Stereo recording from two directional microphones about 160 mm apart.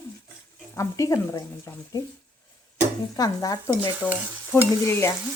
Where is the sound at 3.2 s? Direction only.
25° left (ahead or behind).